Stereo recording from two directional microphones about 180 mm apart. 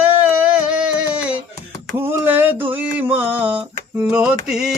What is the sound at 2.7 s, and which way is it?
Music, 10° right (ahead or behind).